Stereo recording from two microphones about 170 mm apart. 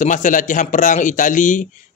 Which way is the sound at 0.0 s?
50° left (ahead or behind).